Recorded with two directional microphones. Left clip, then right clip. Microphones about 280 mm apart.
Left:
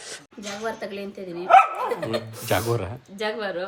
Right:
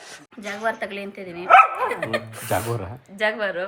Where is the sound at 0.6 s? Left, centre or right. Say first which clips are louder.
Right 5 dB; centre.